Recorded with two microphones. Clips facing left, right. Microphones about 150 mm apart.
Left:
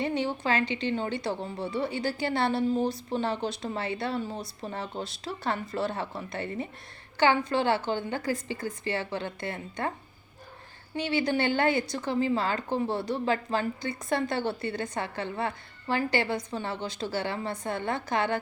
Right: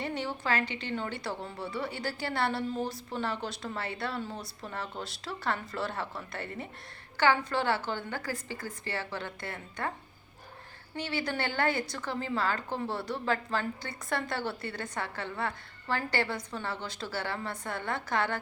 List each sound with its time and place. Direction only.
0.0 s a woman's voice: 20° left (ahead or behind)
10.9 s a woman's voice: 20° left (ahead or behind)